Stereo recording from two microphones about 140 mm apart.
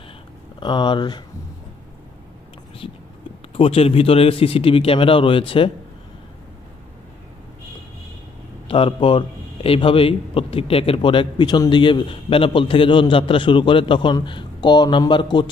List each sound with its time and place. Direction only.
0.6 s a man's voice: 35° left (ahead or behind)
2.8 s a man's voice: 40° left (ahead or behind)
8.6 s a man's voice: 40° left (ahead or behind)